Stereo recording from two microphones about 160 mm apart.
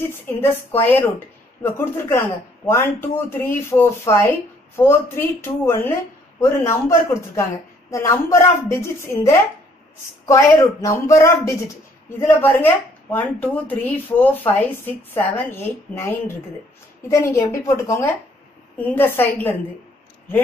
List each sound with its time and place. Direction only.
0.0 s a man's voice: 15° left (ahead or behind)